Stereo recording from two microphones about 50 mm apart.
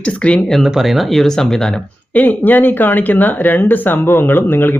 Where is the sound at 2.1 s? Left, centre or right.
Left.